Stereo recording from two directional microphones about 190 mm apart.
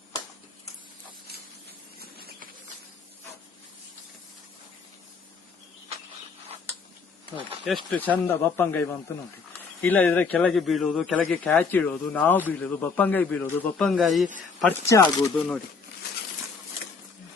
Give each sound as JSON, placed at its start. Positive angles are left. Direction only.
{"t": 2.0, "sound": "a sound", "side_deg": -55}
{"t": 7.3, "sound": "speech", "side_deg": 0}
{"t": 14.8, "sound": "speech", "side_deg": 20}
{"t": 15.4, "sound": "speech", "side_deg": 5}